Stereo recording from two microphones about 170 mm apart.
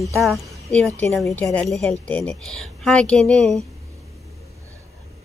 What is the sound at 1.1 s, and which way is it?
A woman's voice, 5° left (ahead or behind).